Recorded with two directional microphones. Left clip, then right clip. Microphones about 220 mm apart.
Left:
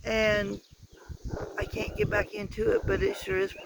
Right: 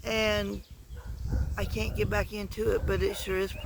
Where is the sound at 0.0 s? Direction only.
15° right (ahead or behind).